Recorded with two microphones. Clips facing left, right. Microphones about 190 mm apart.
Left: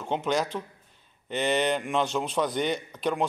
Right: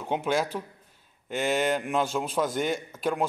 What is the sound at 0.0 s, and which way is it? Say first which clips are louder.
Speech: even; 10° right (ahead or behind).